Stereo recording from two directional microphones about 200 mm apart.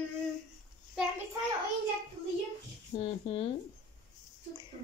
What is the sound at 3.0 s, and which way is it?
Speech, 25° left (ahead or behind).